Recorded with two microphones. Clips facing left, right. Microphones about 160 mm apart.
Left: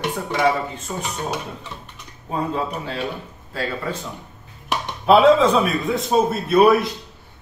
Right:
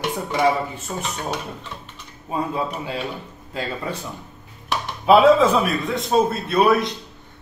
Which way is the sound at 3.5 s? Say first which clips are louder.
Left 1 dB; 15° right (ahead or behind).